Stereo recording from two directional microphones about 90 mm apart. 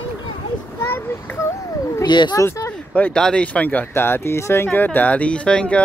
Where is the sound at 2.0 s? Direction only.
60° left (ahead or behind).